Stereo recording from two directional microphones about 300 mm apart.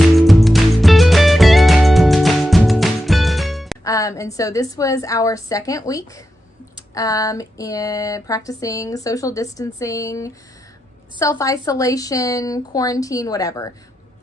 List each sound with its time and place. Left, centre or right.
0.1 s music: centre
3.8 s speech: centre